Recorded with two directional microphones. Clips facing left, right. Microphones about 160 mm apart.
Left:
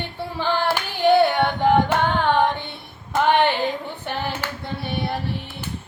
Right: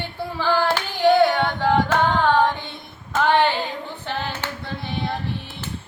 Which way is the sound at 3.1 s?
15° left (ahead or behind).